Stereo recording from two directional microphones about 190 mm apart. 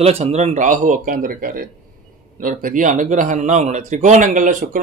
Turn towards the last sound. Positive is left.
turn(degrees=-45)  # may be behind; listen again after turning